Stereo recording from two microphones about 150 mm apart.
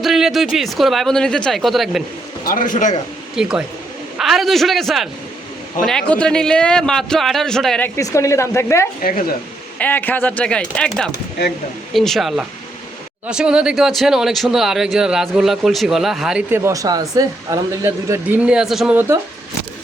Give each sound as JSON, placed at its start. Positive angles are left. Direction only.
{"t": 0.0, "sound": "speech", "side_deg": 0}
{"t": 2.4, "sound": "a man's voice", "side_deg": 70}
{"t": 3.4, "sound": "speech", "side_deg": -5}
{"t": 7.9, "sound": "speech", "side_deg": 20}
{"t": 9.0, "sound": "speech", "side_deg": 70}
{"t": 9.7, "sound": "speech", "side_deg": 10}
{"t": 16.5, "sound": "speech", "side_deg": -15}
{"t": 18.4, "sound": "speech", "side_deg": -5}
{"t": 18.9, "sound": "speech", "side_deg": -15}